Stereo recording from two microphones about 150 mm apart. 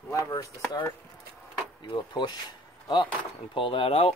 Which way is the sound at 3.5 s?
35° left (ahead or behind).